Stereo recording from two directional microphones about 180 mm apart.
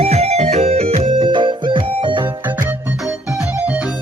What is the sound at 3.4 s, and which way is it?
Music, 10° right (ahead or behind).